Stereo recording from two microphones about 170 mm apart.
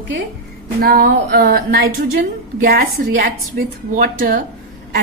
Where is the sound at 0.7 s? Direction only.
60° right (ahead or behind).